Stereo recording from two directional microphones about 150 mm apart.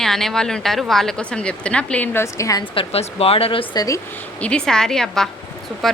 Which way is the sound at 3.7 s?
25° left (ahead or behind).